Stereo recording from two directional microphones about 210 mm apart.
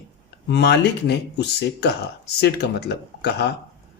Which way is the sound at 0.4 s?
55° left (ahead or behind).